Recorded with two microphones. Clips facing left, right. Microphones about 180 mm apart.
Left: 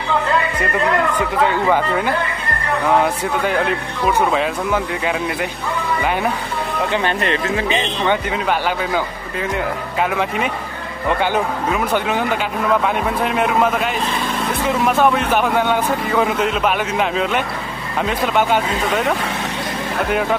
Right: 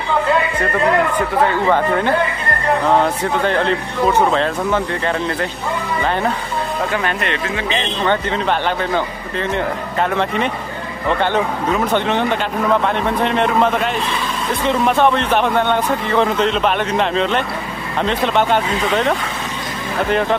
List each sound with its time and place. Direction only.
1.7 s speech: 5° left (ahead or behind)
7.2 s speech: 35° left (ahead or behind)
7.7 s a man's voice: 10° left (ahead or behind)